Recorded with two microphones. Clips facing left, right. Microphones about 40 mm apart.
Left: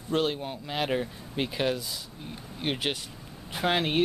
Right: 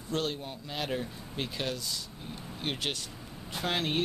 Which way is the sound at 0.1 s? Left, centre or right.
Left.